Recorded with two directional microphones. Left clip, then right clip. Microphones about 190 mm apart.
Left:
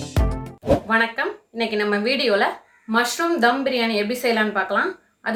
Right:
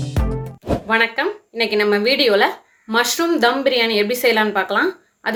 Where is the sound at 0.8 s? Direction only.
30° right (ahead or behind).